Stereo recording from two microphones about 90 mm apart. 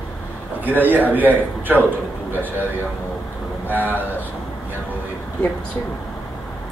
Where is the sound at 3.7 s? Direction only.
20° right (ahead or behind).